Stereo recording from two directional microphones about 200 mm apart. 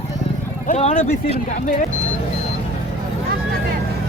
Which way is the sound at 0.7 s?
30° left (ahead or behind).